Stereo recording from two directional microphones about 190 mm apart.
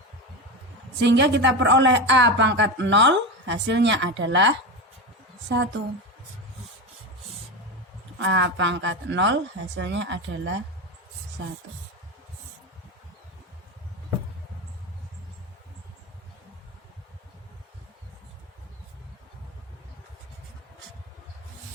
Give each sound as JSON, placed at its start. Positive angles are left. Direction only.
{"t": 0.9, "sound": "speech", "side_deg": -70}
{"t": 8.2, "sound": "speech", "side_deg": -70}